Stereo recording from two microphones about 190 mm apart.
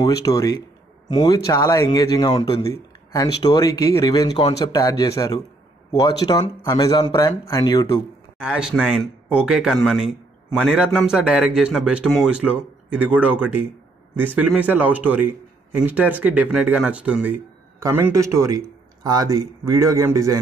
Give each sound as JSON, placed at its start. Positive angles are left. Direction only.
{"t": 0.0, "sound": "speech", "side_deg": 20}
{"t": 2.6, "sound": "speech", "side_deg": 20}
{"t": 8.5, "sound": "a man's voice", "side_deg": -5}